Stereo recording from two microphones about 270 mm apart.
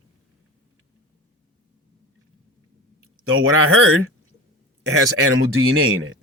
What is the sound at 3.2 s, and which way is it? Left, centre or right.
Speech, right.